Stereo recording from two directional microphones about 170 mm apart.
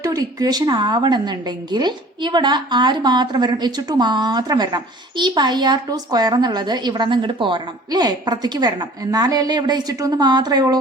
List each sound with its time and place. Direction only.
0.0 s a woman's voice: 20° right (ahead or behind)